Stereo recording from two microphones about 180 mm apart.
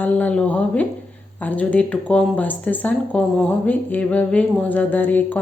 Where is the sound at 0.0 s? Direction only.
10° left (ahead or behind).